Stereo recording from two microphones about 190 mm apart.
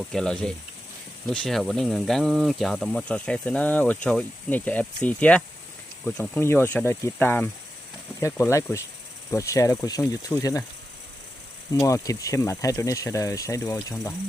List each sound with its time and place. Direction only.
0.1 s speech: 5° left (ahead or behind)
11.7 s speech: 15° left (ahead or behind)